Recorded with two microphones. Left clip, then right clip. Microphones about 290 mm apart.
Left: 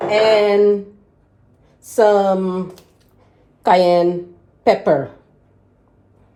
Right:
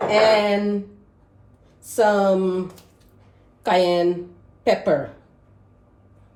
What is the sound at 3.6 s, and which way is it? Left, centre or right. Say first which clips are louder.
A woman's voice: left 6 dB; left.